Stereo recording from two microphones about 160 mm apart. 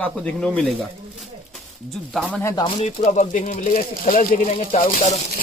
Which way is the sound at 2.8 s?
45° left (ahead or behind).